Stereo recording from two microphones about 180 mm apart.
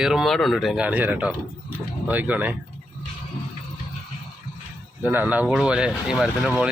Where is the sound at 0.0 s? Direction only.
Centre (ahead or behind).